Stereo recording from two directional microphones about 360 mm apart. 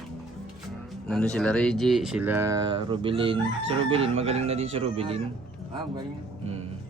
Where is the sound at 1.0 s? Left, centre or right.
Centre.